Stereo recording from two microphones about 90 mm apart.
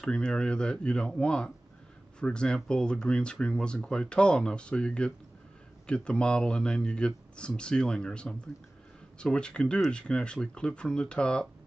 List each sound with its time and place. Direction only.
0.0 s speech: 10° left (ahead or behind)